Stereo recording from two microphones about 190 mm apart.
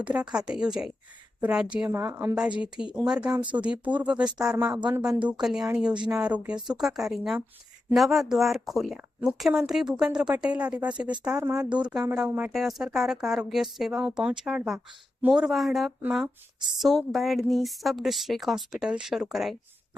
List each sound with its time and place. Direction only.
0.0 s a woman's voice: 5° right (ahead or behind)
11.3 s a woman's voice: 15° right (ahead or behind)
11.8 s a woman's voice: 5° right (ahead or behind)